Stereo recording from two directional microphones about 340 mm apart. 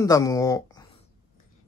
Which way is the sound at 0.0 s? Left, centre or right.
Centre.